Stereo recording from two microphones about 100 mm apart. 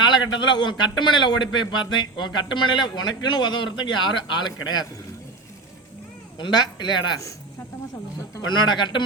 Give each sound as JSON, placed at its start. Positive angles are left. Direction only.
{"t": 0.0, "sound": "a man's voice", "side_deg": 50}
{"t": 6.4, "sound": "a man's voice", "side_deg": 50}
{"t": 8.4, "sound": "a man's voice", "side_deg": 45}